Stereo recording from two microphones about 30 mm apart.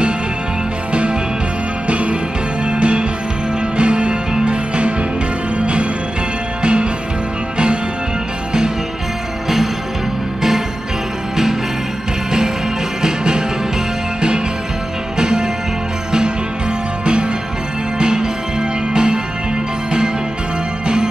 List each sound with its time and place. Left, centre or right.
1.9 s music: right
2.6 s music: right
6.6 s music: right
13.0 s music: right
15.1 s music: right
17.0 s music: right
20.8 s music: right